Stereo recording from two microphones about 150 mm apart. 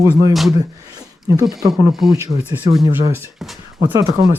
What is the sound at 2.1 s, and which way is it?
Speech, 25° right (ahead or behind).